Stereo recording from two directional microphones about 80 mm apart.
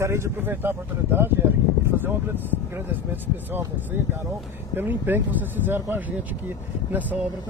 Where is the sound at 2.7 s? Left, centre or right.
Right.